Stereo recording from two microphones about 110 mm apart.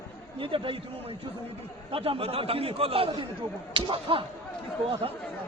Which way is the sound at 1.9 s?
55° right (ahead or behind).